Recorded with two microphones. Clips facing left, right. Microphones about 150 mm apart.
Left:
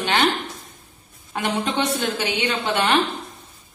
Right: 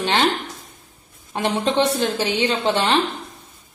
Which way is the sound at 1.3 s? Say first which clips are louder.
Right 4 dB; 35° right (ahead or behind).